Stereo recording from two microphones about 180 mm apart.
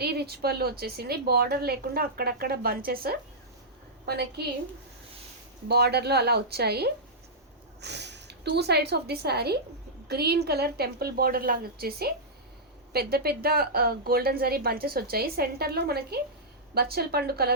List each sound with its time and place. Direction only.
0.0 s a woman's voice: 60° right (ahead or behind)
5.6 s a woman's voice: 65° right (ahead or behind)